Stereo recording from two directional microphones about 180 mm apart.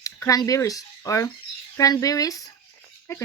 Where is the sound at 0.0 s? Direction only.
20° left (ahead or behind).